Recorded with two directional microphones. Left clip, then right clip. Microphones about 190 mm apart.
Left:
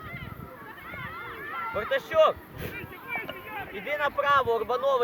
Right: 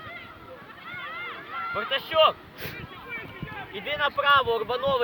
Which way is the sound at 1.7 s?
30° right (ahead or behind).